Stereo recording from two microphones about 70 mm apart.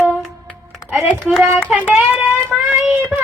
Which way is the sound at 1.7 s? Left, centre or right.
Centre.